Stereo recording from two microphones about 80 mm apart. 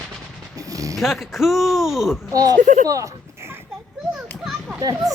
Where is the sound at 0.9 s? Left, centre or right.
Centre.